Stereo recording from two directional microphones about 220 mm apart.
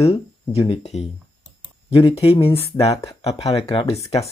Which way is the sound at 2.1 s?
25° left (ahead or behind).